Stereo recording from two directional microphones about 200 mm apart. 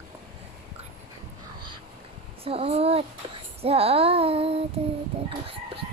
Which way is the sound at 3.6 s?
30° right (ahead or behind).